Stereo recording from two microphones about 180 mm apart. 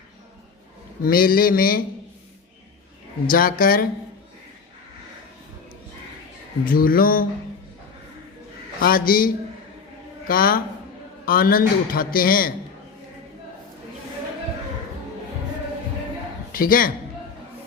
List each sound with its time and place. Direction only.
1.0 s a man's voice: 55° left (ahead or behind)
3.2 s a man's voice: 55° left (ahead or behind)
6.7 s a man's voice: 55° left (ahead or behind)
8.8 s a man's voice: 55° left (ahead or behind)
16.5 s a man's voice: 50° left (ahead or behind)